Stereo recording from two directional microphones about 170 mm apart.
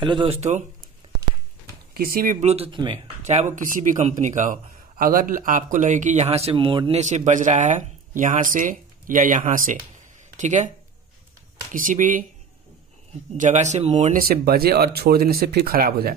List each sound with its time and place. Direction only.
0.0 s speech: 30° right (ahead or behind); by 0.8 s 45° right (ahead or behind)
2.0 s speech: 60° right (ahead or behind)
2.4 s speech: 35° right (ahead or behind)
3.2 s speech: 45° right (ahead or behind)
7.0 s speech: 45° right (ahead or behind)
11.7 s speech: 50° right (ahead or behind)
13.4 s speech: 45° right (ahead or behind)
14.2 s speech: 65° right (ahead or behind)